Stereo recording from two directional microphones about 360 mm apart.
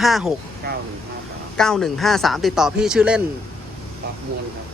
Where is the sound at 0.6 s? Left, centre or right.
Right.